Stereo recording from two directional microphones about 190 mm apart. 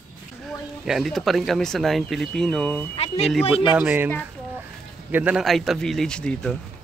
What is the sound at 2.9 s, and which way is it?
Speech, 35° left (ahead or behind).